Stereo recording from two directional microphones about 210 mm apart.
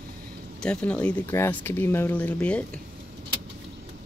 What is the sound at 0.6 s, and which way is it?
Speech, 5° left (ahead or behind).